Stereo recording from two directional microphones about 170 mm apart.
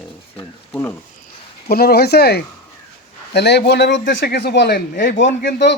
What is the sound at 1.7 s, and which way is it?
A man's voice, 65° left (ahead or behind).